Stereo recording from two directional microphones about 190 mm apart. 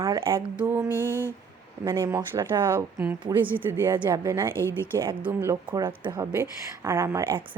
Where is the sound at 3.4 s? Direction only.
10° right (ahead or behind).